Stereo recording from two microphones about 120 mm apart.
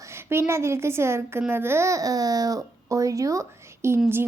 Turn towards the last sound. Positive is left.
turn(degrees=-20)  # may be behind; listen again after turning